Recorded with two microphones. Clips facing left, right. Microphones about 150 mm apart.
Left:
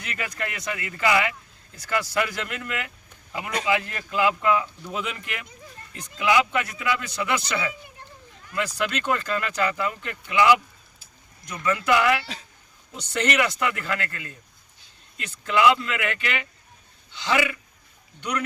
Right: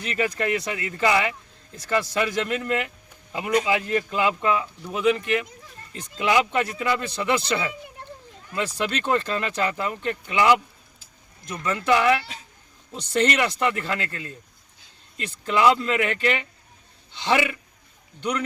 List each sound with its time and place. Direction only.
0.0 s a man's voice: 30° right (ahead or behind)
3.4 s speech: 20° right (ahead or behind)
5.9 s a man's voice: 35° right (ahead or behind)
15.5 s a man's voice: 35° right (ahead or behind)